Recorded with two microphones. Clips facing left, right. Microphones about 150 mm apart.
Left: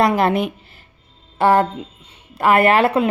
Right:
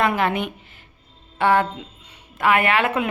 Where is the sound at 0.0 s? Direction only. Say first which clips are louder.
Left 5 dB; 35° left (ahead or behind).